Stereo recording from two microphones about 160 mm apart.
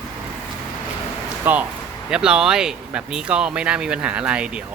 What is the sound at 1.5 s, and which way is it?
Speech, 10° right (ahead or behind).